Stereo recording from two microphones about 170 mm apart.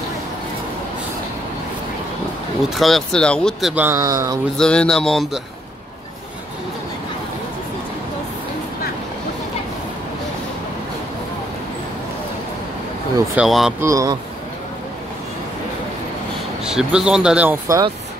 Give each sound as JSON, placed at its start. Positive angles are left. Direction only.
{"t": 2.7, "sound": "speech", "side_deg": 0}
{"t": 3.7, "sound": "speech", "side_deg": -10}
{"t": 4.6, "sound": "speech", "side_deg": 5}
{"t": 13.4, "sound": "speech", "side_deg": -5}
{"t": 13.7, "sound": "speech", "side_deg": -20}
{"t": 16.6, "sound": "speech", "side_deg": -5}
{"t": 17.6, "sound": "speech", "side_deg": -20}